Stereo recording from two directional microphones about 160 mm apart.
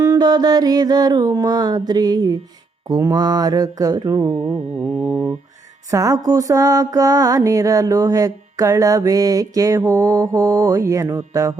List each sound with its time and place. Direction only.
0.0 s music: 25° right (ahead or behind)
4.8 s mantra: 10° right (ahead or behind)
5.9 s music: 20° right (ahead or behind)